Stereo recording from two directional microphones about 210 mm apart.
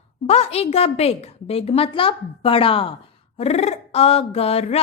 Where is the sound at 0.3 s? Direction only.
30° left (ahead or behind).